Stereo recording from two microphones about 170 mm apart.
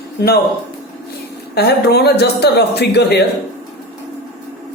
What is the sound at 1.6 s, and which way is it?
Speech, 75° left (ahead or behind).